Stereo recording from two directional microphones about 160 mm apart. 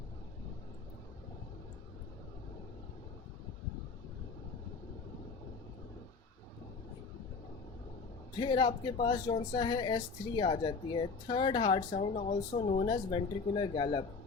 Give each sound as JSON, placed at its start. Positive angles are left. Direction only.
{"t": 8.4, "sound": "a man's voice", "side_deg": 30}